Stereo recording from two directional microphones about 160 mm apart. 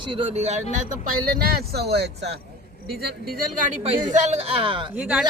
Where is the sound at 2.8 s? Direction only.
80° right.